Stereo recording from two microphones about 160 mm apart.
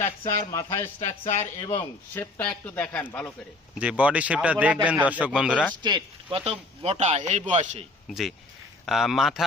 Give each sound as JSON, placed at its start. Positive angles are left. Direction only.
{"t": 0.2, "sound": "speech", "side_deg": 20}
{"t": 0.9, "sound": "speech", "side_deg": 40}
{"t": 2.1, "sound": "speech", "side_deg": 10}
{"t": 3.8, "sound": "a man's voice", "side_deg": -10}
{"t": 5.8, "sound": "speech", "side_deg": -25}
{"t": 6.4, "sound": "a man's voice", "side_deg": -40}
{"t": 8.0, "sound": "speech", "side_deg": 0}